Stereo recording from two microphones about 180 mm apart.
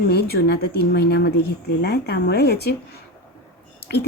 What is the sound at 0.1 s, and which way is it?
A woman's voice, 65° left (ahead or behind).